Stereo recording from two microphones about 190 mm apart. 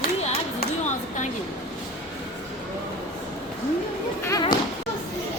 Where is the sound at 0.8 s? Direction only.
40° left (ahead or behind).